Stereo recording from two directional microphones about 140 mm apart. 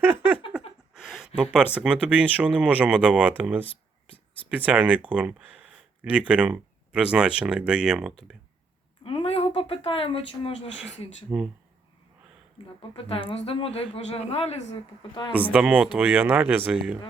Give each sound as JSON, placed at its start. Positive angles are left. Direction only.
{"t": 0.0, "sound": "a sound", "side_deg": -15}
{"t": 0.9, "sound": "a sound", "side_deg": 0}
{"t": 1.4, "sound": "speech", "side_deg": -10}
{"t": 9.0, "sound": "speech", "side_deg": 45}
{"t": 11.3, "sound": "speech", "side_deg": -10}
{"t": 13.1, "sound": "speech", "side_deg": 40}
{"t": 15.5, "sound": "speech", "side_deg": -10}